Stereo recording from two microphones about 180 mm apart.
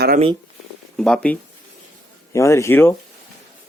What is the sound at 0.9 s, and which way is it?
Speech, 5° left (ahead or behind).